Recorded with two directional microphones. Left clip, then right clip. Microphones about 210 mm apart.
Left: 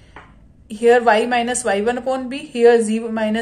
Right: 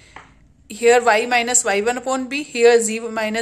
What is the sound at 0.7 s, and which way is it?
A woman's voice, 35° right (ahead or behind).